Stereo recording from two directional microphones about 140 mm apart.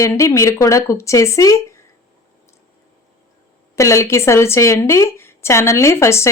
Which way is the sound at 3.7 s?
20° left (ahead or behind).